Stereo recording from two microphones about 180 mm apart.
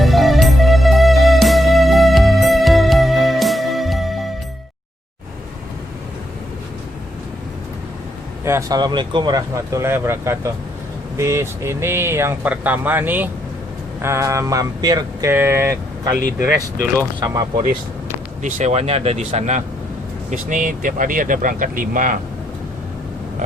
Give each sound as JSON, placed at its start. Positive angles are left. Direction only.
{"t": 0.0, "sound": "music", "side_deg": 0}
{"t": 8.4, "sound": "speech", "side_deg": -20}
{"t": 17.2, "sound": "speech", "side_deg": -20}
{"t": 18.4, "sound": "speech", "side_deg": -40}